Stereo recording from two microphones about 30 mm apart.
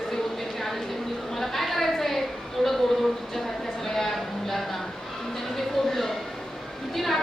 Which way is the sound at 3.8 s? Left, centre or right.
Centre.